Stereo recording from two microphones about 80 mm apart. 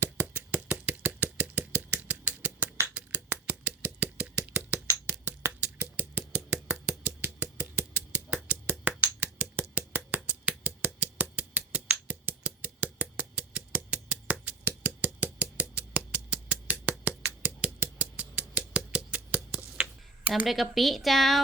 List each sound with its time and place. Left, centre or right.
0.0 s engine: centre
2.9 s a sound: centre
20.3 s speech: centre